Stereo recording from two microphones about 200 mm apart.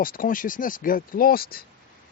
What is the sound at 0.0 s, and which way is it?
Speech, 45° left (ahead or behind).